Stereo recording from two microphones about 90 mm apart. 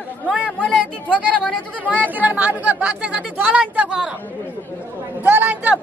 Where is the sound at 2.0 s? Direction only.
20° right (ahead or behind).